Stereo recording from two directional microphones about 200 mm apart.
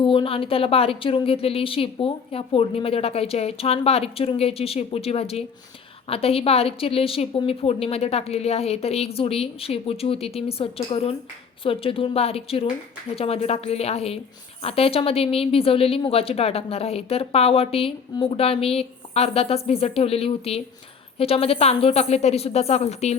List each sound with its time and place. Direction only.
0.0 s a woman's voice: 25° left (ahead or behind)